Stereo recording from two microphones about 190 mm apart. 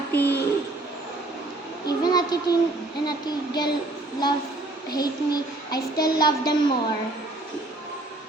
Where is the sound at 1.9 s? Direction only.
20° left (ahead or behind).